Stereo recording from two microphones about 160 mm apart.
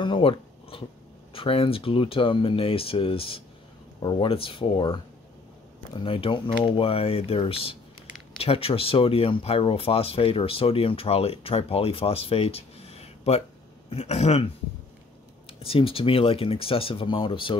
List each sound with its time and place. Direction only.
0.0 s a sound: 30° left (ahead or behind)
1.3 s speech: 35° left (ahead or behind)
15.6 s speech: 35° left (ahead or behind)